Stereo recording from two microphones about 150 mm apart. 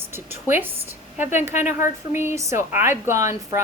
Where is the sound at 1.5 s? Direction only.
50° left (ahead or behind).